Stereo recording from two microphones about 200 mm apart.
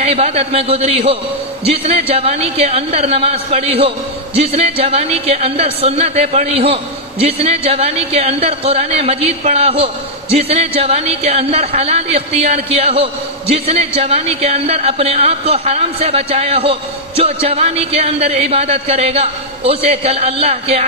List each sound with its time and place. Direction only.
0.0 s a man's voice: 30° right (ahead or behind)